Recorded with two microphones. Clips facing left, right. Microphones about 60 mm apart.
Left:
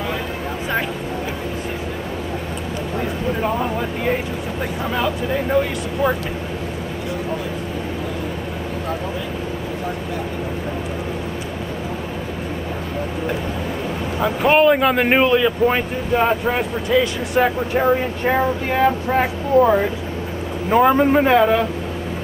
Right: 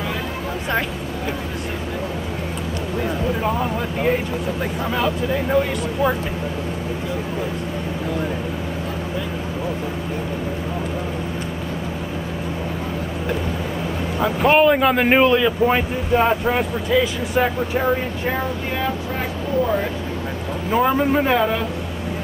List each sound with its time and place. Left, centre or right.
4.9 s speech: centre
14.2 s speech: centre
18.7 s speech: left
20.7 s a man's voice: centre